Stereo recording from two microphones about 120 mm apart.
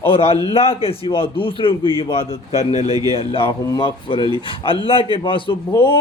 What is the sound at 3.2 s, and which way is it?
A man's voice, 50° left (ahead or behind).